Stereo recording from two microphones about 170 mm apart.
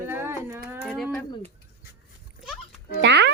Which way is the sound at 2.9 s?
90° right.